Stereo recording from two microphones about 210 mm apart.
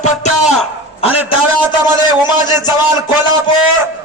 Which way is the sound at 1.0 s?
25° left (ahead or behind).